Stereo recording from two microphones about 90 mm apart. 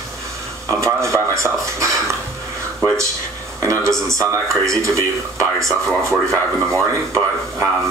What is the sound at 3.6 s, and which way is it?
Speech, 35° right (ahead or behind).